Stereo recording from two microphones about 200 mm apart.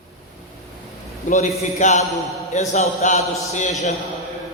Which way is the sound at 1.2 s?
40° left (ahead or behind).